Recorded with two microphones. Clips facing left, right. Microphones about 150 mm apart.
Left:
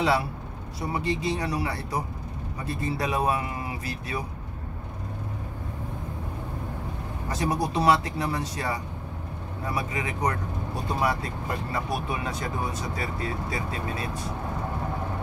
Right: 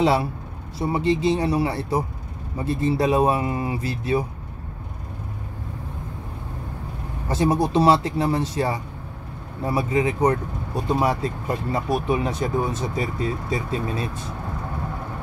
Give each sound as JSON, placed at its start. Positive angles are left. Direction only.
{"t": 0.7, "sound": "speech", "side_deg": -25}
{"t": 7.2, "sound": "speech", "side_deg": -25}